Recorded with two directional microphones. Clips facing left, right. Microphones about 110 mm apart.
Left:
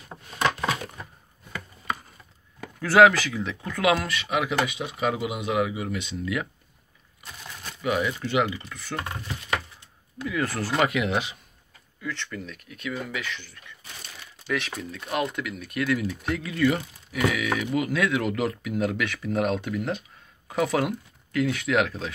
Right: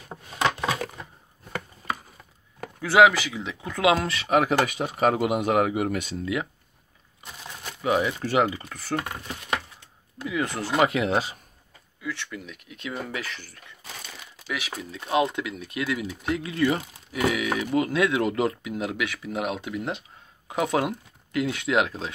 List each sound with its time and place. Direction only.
2.8 s speech: 15° right (ahead or behind); by 6.1 s 45° right (ahead or behind)
7.8 s speech: 30° right (ahead or behind)
10.2 s speech: 20° right (ahead or behind); by 11.3 s 35° right (ahead or behind)
12.0 s speech: 10° right (ahead or behind); by 13.7 s 40° right (ahead or behind)
14.5 s speech: 10° right (ahead or behind); by 22.1 s 25° right (ahead or behind)